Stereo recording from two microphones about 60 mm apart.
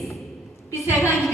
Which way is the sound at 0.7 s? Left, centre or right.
Left.